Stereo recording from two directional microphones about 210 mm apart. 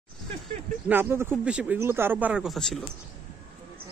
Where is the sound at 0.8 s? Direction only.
10° right (ahead or behind).